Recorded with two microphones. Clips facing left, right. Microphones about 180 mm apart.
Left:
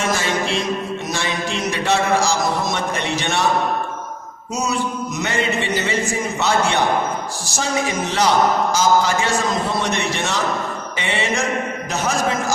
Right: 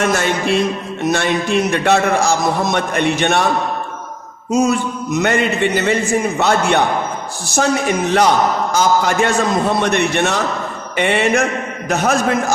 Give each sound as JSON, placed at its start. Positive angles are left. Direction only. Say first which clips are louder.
{"t": 0.0, "sound": "music", "louder": "right 4 dB", "side_deg": -60}
{"t": 1.1, "sound": "a man's voice", "louder": "right 10 dB", "side_deg": -60}
{"t": 4.5, "sound": "a man's voice", "louder": "right 7 dB", "side_deg": -55}